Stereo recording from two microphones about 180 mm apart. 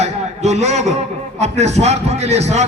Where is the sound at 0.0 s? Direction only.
40° right (ahead or behind).